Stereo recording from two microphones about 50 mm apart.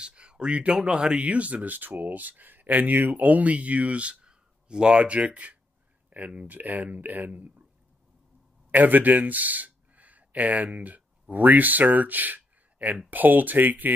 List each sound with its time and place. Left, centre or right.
0.0 s speech: centre; by 7.6 s right
8.7 s speech: right